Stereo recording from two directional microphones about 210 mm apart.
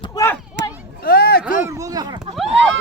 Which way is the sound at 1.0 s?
50° left (ahead or behind).